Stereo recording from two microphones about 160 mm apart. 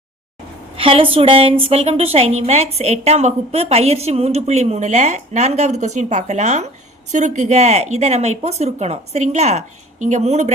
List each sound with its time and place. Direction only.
0.8 s a woman's voice: 35° right (ahead or behind)